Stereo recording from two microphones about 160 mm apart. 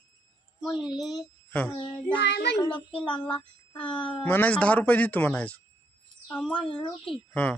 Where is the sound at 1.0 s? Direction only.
Centre (ahead or behind).